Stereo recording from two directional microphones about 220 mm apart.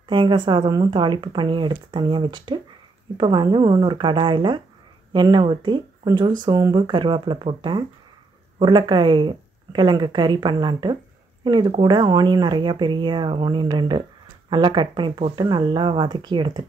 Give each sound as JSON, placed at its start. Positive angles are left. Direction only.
{"t": 0.1, "sound": "speech", "side_deg": -20}